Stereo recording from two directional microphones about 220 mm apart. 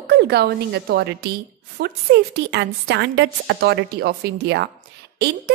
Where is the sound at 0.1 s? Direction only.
50° right (ahead or behind).